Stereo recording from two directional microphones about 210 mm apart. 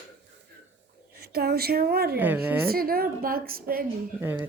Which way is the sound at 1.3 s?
45° right (ahead or behind).